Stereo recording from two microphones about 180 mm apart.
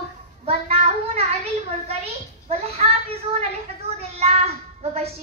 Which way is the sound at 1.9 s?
35° right (ahead or behind).